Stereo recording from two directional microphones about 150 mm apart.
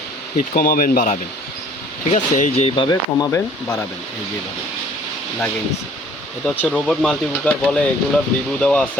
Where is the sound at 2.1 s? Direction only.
50° left (ahead or behind).